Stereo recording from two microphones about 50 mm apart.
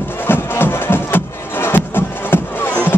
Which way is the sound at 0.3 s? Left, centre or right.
Left.